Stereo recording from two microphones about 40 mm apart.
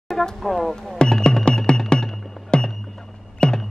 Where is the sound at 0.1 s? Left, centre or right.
Centre.